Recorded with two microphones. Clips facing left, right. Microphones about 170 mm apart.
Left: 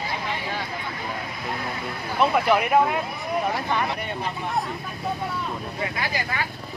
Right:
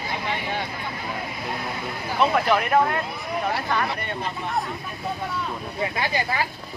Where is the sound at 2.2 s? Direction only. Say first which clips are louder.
Left 1 dB; 5° left (ahead or behind).